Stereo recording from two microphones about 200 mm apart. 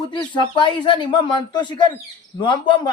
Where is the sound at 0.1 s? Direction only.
25° left (ahead or behind).